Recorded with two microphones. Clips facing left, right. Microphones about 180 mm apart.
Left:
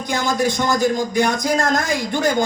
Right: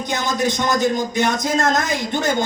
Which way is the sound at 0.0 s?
20° right (ahead or behind).